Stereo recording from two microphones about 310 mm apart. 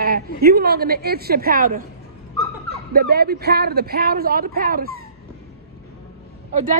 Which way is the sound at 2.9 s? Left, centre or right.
Right.